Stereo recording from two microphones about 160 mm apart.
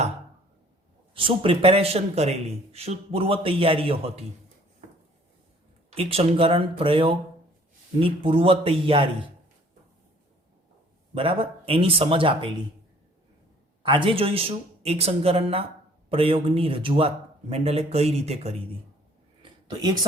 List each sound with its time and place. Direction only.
1.1 s speech: 35° right (ahead or behind)
5.9 s speech: 35° right (ahead or behind)
11.1 s speech: 35° right (ahead or behind)
13.8 s speech: 30° right (ahead or behind)
19.4 s a sound: 25° right (ahead or behind)